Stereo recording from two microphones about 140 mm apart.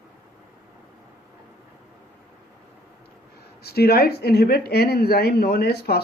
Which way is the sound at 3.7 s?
90° left.